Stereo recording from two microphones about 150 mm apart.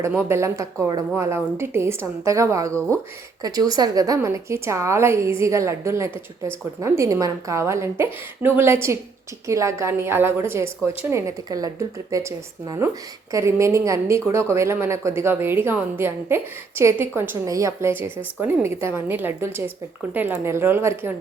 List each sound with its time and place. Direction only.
0.1 s a woman's voice: 15° right (ahead or behind)